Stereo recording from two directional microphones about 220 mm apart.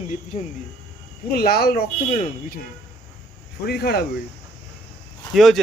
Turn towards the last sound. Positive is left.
turn(degrees=0)  # may be behind; listen again after turning